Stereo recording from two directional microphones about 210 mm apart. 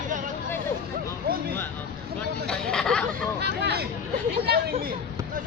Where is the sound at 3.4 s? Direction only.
50° right (ahead or behind).